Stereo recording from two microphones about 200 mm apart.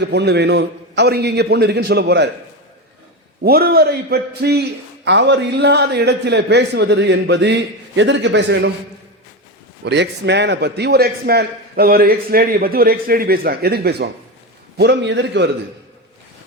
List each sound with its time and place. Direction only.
0.0 s a man's voice: 60° right (ahead or behind)
3.4 s a man's voice: 50° right (ahead or behind)
9.8 s a man's voice: 60° right (ahead or behind)